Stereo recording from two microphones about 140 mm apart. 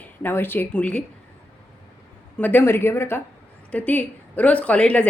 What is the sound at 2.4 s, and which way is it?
Speech, 15° left (ahead or behind).